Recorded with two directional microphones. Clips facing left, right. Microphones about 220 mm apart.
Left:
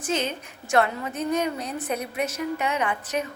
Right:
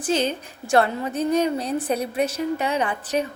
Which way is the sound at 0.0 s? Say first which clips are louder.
Right 4 dB; 35° right (ahead or behind).